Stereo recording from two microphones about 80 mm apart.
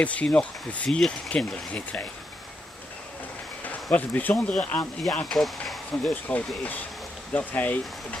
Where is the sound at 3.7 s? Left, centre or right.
Centre.